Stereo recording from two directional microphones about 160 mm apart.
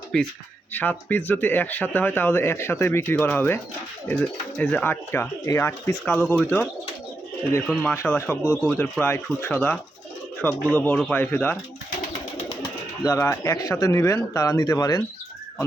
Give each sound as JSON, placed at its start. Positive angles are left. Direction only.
{"t": 0.1, "sound": "speech", "side_deg": 5}
{"t": 7.7, "sound": "speech", "side_deg": 10}
{"t": 13.1, "sound": "speech", "side_deg": 15}